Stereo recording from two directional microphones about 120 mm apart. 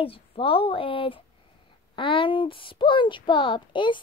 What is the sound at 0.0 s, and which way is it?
A child's voice, 50° left (ahead or behind).